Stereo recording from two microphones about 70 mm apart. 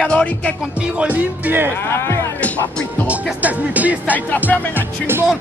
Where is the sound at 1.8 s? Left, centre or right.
Left.